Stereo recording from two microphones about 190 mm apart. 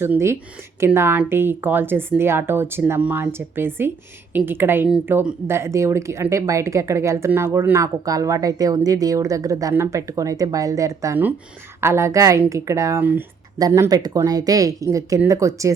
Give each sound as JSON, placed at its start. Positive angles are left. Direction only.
{"t": 0.0, "sound": "speech", "side_deg": -15}